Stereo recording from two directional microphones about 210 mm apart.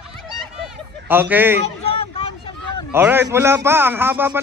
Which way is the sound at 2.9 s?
10° right (ahead or behind).